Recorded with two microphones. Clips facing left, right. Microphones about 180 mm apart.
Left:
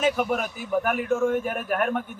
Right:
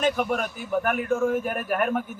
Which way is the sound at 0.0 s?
5° left (ahead or behind).